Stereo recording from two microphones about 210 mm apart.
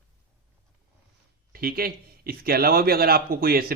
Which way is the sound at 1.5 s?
45° right (ahead or behind).